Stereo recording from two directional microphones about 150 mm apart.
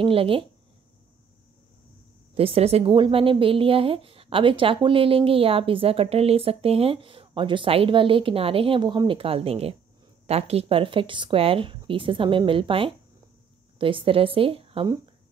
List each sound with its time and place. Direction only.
0.0 s a woman's voice: 35° right (ahead or behind)
2.3 s a woman's voice: 40° right (ahead or behind)